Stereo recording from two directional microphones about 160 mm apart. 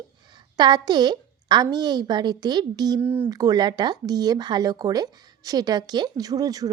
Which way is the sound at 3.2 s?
25° right (ahead or behind).